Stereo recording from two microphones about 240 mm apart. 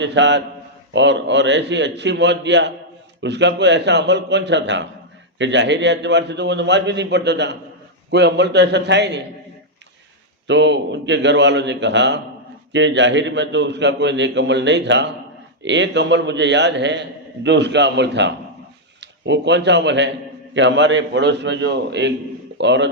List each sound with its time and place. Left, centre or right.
0.0 s a man's voice: right
10.4 s a man's voice: right